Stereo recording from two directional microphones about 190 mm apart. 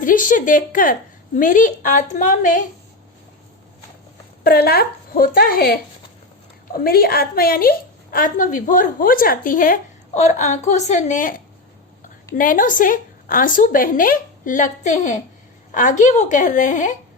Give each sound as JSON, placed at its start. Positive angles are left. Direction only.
{"t": 0.0, "sound": "a woman's voice", "side_deg": 45}
{"t": 4.4, "sound": "a woman's voice", "side_deg": 55}